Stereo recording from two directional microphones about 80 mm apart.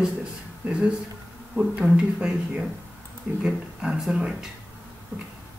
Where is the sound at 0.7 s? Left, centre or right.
Centre.